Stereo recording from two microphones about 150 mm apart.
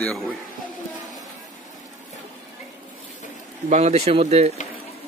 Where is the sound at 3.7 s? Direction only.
45° right (ahead or behind).